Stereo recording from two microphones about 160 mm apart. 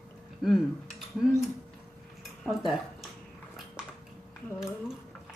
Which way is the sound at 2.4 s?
Centre (ahead or behind).